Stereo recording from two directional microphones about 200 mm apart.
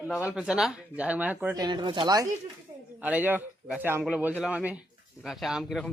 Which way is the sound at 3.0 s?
5° right (ahead or behind).